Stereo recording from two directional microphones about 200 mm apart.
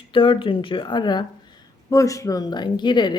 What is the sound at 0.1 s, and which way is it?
Speech, 25° left (ahead or behind).